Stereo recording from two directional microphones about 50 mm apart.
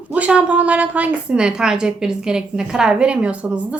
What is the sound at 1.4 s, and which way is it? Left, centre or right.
A woman's voice, centre.